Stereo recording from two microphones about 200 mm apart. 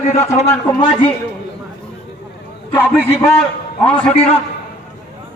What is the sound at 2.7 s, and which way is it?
Speech, 10° left (ahead or behind).